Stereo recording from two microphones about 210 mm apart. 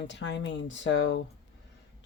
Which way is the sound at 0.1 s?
60° left (ahead or behind).